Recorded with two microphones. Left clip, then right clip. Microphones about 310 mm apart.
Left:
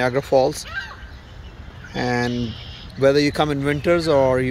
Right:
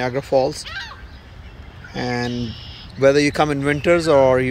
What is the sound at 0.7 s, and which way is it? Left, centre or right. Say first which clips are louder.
Speech: even; left.